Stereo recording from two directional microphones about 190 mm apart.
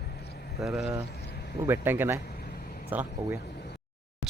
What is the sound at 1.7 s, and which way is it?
Speech, 10° right (ahead or behind).